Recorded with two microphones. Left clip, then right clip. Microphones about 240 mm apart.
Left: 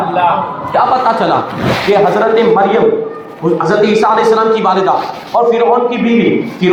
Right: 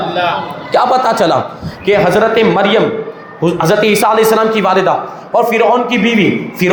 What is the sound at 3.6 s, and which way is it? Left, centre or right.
A man's voice, right.